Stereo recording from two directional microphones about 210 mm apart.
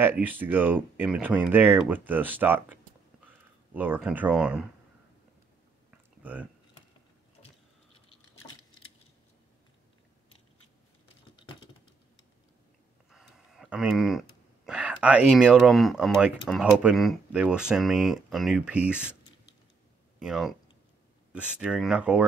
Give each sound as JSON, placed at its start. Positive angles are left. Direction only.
{"t": 0.0, "sound": "speech", "side_deg": -10}
{"t": 5.9, "sound": "a sound", "side_deg": -5}
{"t": 11.3, "sound": "typing", "side_deg": 25}
{"t": 13.1, "sound": "a sound", "side_deg": 0}
{"t": 14.7, "sound": "speech", "side_deg": -5}
{"t": 20.2, "sound": "speech", "side_deg": 0}